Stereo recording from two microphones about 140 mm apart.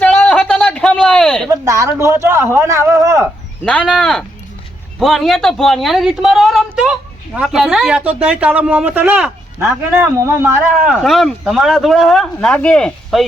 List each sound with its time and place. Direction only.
0.0 s a sound: 10° left (ahead or behind)
1.5 s speech: 20° right (ahead or behind)
3.8 s speech: 5° left (ahead or behind); by 10.7 s 20° right (ahead or behind)
10.8 s speech: centre (ahead or behind)